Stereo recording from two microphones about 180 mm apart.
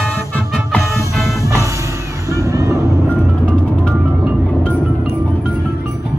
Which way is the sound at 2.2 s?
15° right (ahead or behind).